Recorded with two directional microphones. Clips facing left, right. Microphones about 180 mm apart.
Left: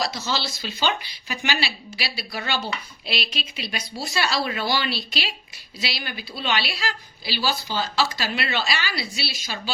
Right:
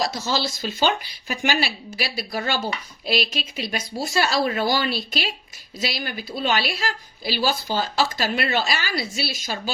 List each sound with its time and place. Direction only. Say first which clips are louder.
0.0 s a woman's voice: right 3 dB; 45° right (ahead or behind)